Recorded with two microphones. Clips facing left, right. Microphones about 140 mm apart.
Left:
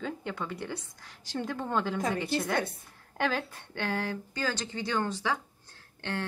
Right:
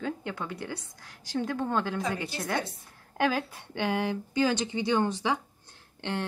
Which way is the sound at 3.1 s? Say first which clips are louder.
Right 3 dB; 5° right (ahead or behind).